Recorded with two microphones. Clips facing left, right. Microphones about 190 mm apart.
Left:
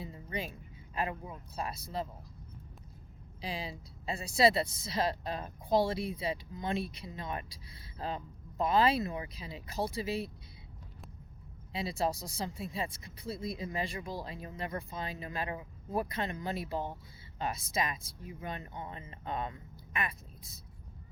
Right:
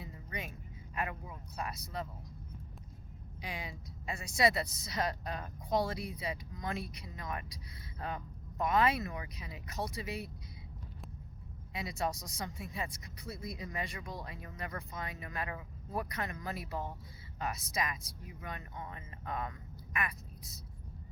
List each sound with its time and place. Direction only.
0.0 s vehicle: 30° left (ahead or behind)
0.9 s a woman's voice: 25° left (ahead or behind)
3.4 s a woman's voice: 30° left (ahead or behind)
11.7 s a woman's voice: 30° left (ahead or behind)